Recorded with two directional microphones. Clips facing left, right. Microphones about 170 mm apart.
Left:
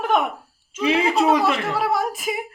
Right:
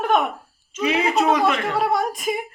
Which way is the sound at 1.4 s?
5° left (ahead or behind).